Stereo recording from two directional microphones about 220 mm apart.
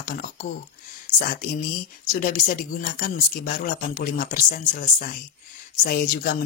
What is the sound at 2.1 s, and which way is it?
Speech, 40° left (ahead or behind).